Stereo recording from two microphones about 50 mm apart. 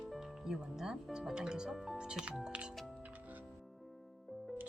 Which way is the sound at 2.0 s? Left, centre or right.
Centre.